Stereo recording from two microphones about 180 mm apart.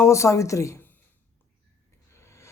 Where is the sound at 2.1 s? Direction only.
15° left (ahead or behind).